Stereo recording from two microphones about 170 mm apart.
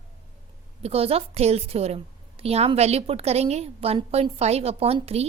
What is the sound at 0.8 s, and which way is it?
A woman's voice, 35° right (ahead or behind).